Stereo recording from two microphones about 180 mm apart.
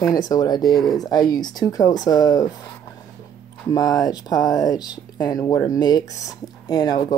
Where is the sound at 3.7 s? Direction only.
20° left (ahead or behind).